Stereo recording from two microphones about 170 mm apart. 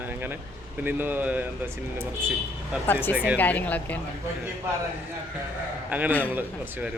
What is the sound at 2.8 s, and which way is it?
Speech, 10° left (ahead or behind).